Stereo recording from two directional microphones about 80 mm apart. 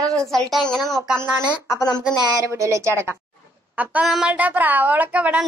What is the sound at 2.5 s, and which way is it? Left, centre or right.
Speech, right.